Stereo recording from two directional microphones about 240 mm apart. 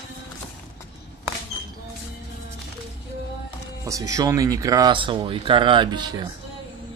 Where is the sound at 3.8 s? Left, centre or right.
Centre.